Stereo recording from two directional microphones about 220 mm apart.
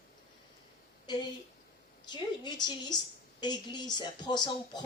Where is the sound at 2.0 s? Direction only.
20° left (ahead or behind).